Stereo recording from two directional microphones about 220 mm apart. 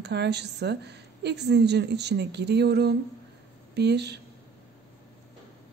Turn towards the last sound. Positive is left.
turn(degrees=-50)  # may be behind; listen again after turning